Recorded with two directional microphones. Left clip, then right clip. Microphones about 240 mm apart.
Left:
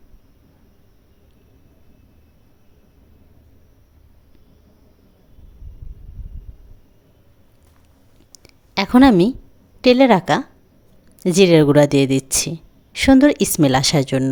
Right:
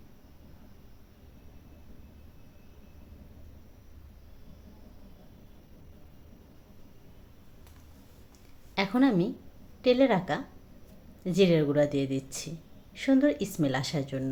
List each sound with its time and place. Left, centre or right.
8.7 s a woman's voice: left